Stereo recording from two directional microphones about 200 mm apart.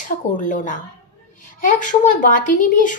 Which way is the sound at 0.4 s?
40° left (ahead or behind).